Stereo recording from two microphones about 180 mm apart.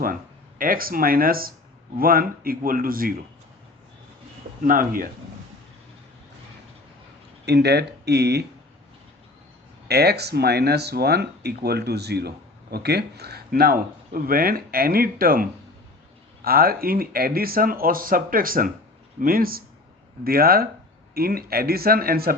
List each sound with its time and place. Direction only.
0.6 s a man's voice: 50° right (ahead or behind)
4.6 s a man's voice: 50° right (ahead or behind)
7.4 s speech: 65° right (ahead or behind)
9.9 s a man's voice: 65° right (ahead or behind)